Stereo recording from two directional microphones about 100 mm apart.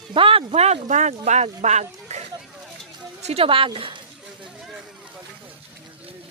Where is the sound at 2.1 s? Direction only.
90° right.